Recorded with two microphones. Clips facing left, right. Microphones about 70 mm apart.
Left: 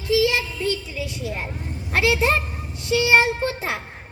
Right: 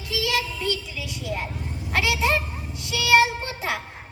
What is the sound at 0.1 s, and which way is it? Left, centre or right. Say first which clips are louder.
A child's voice: left 6 dB; left.